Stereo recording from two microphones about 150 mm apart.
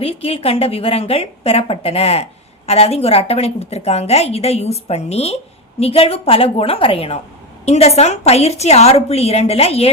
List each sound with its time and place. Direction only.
0.0 s a woman's voice: 40° left (ahead or behind)